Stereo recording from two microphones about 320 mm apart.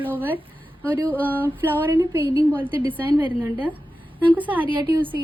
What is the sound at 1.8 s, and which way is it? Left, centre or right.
Speech, centre.